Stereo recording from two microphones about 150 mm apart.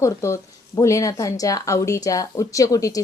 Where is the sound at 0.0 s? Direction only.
20° left (ahead or behind).